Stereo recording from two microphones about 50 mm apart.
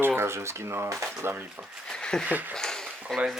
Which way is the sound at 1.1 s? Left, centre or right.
Right.